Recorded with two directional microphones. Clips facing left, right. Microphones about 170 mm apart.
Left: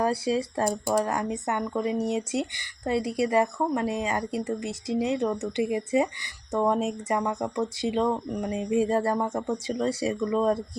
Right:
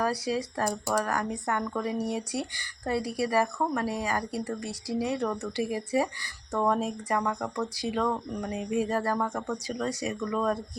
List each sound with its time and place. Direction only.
0.0 s speech: 25° left (ahead or behind)